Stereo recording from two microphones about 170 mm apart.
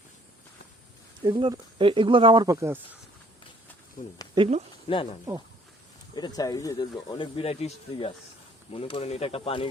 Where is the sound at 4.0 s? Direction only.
55° left (ahead or behind).